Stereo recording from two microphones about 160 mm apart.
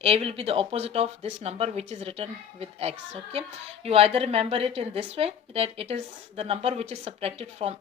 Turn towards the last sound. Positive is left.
turn(degrees=-40)  # may be behind; listen again after turning